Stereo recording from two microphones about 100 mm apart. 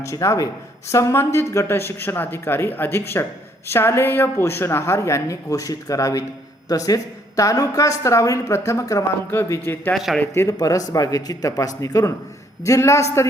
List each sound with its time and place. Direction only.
0.0 s a woman's voice: 30° left (ahead or behind)
9.9 s a man's voice: centre (ahead or behind)
10.3 s a woman's voice: 30° left (ahead or behind)